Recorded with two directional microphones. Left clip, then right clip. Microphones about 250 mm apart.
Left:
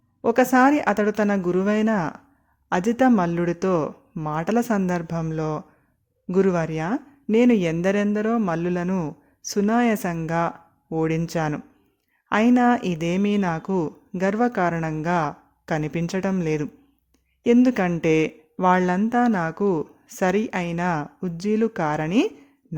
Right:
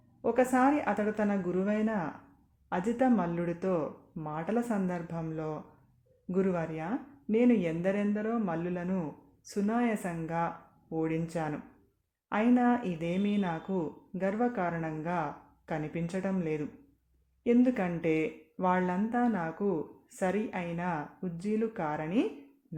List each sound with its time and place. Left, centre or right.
0.2 s speech: left